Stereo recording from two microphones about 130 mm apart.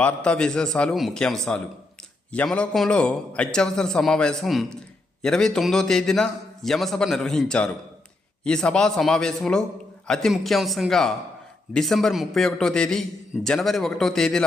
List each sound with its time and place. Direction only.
0.0 s a man's voice: 5° left (ahead or behind)